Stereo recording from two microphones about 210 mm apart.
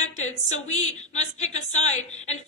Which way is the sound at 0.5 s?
75° left (ahead or behind).